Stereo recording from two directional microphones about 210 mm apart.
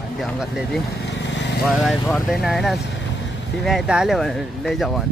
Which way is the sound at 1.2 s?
55° left (ahead or behind).